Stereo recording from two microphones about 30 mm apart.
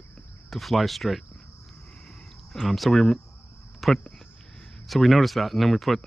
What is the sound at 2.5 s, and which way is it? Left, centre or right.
Speech, centre.